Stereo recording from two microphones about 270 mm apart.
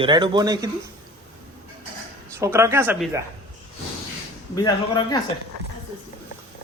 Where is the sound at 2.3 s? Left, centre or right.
Centre.